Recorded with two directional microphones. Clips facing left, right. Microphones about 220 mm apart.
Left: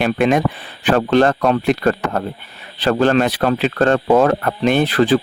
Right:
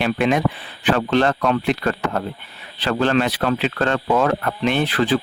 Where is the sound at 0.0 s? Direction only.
45° left (ahead or behind).